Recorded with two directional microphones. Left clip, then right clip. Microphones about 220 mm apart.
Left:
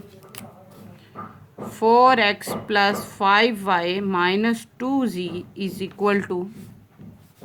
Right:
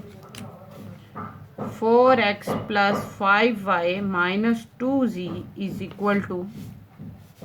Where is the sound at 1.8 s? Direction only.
40° left (ahead or behind).